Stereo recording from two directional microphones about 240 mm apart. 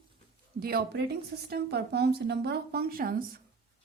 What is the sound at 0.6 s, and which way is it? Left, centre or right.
Speech, right.